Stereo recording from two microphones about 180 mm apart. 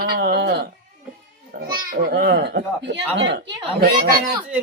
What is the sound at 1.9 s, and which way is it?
Speech, 55° right (ahead or behind).